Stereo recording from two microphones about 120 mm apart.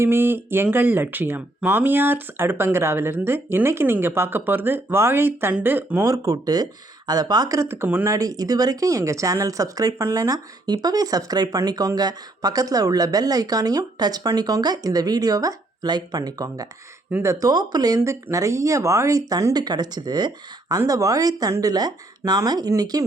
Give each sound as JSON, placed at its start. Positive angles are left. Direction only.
{"t": 0.0, "sound": "speech", "side_deg": -20}
{"t": 6.2, "sound": "speech", "side_deg": -30}
{"t": 8.1, "sound": "speech", "side_deg": -30}
{"t": 17.1, "sound": "speech", "side_deg": -15}
{"t": 17.4, "sound": "speech", "side_deg": -35}